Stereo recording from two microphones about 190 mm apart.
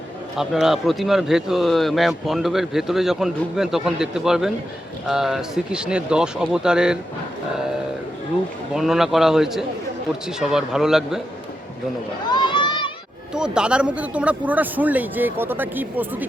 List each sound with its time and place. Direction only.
0.3 s speech: centre (ahead or behind)
8.7 s speech: centre (ahead or behind)
12.3 s a sound: 25° left (ahead or behind)
13.3 s speech: 5° right (ahead or behind)